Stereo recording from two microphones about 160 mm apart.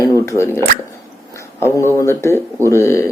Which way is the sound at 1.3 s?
15° left (ahead or behind).